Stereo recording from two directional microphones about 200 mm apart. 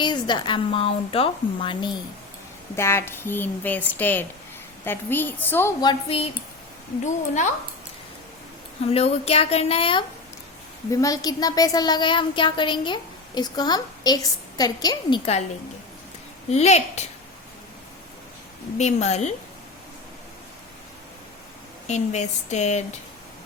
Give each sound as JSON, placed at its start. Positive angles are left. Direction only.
{"t": 0.0, "sound": "speech", "side_deg": 20}
{"t": 2.7, "sound": "a woman's voice", "side_deg": 10}
{"t": 8.9, "sound": "speech", "side_deg": 30}
{"t": 10.9, "sound": "speech", "side_deg": 15}
{"t": 16.5, "sound": "speech", "side_deg": 35}
{"t": 18.8, "sound": "speech", "side_deg": 35}
{"t": 21.8, "sound": "speech", "side_deg": 35}